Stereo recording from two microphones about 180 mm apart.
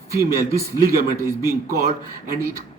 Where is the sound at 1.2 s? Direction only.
15° right (ahead or behind).